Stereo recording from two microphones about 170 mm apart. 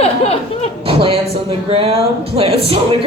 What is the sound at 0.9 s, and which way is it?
Speech, 35° right (ahead or behind).